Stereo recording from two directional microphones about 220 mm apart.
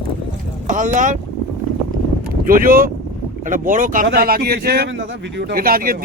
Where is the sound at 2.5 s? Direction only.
40° right (ahead or behind).